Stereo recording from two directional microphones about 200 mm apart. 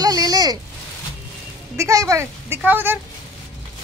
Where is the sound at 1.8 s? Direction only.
15° right (ahead or behind).